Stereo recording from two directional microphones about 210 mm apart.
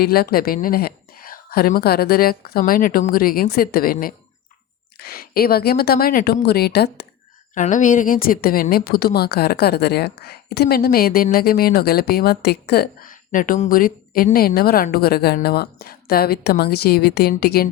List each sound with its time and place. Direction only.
0.0 s a woman's voice: 45° left (ahead or behind)
7.5 s a woman's voice: 35° left (ahead or behind)